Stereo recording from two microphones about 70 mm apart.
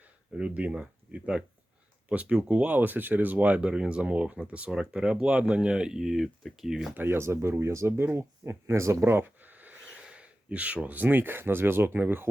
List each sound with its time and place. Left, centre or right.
0.3 s speech: centre
6.9 s speech: right